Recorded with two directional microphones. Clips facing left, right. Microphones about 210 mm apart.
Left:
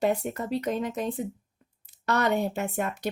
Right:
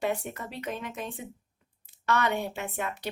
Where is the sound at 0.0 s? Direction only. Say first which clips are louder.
Left 5 dB; 40° left (ahead or behind).